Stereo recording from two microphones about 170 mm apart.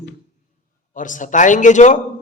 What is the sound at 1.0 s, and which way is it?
A man's voice, 50° left (ahead or behind).